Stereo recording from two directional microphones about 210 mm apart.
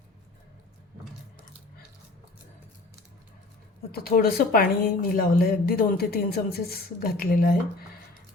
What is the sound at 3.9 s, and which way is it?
Speech, 45° left (ahead or behind).